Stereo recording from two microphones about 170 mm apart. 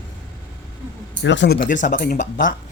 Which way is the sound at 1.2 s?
90° left.